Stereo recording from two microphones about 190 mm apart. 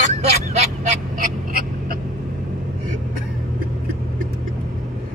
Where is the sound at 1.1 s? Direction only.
50° right (ahead or behind).